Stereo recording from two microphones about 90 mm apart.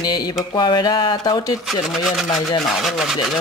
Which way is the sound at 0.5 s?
55° left (ahead or behind).